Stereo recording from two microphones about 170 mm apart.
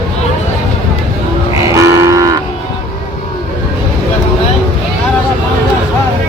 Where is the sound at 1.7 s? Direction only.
20° right (ahead or behind).